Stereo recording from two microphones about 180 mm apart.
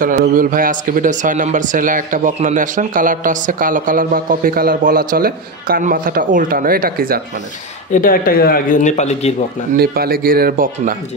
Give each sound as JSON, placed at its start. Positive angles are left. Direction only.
{"t": 0.0, "sound": "speech", "side_deg": -50}
{"t": 7.9, "sound": "speech", "side_deg": 50}
{"t": 9.8, "sound": "speech", "side_deg": -55}